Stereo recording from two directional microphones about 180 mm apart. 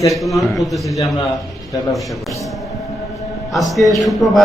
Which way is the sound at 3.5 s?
Centre (ahead or behind).